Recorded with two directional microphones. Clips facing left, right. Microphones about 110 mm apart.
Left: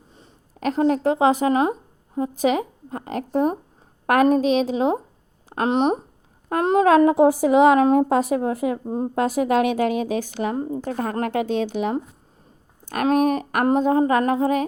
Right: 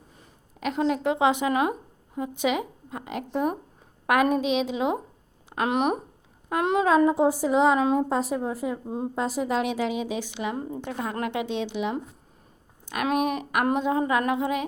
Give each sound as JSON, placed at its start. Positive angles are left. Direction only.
{"t": 0.6, "sound": "speech", "side_deg": 40}
{"t": 6.5, "sound": "speech", "side_deg": 40}
{"t": 6.8, "sound": "a woman's voice", "side_deg": 70}
{"t": 9.1, "sound": "speech", "side_deg": 60}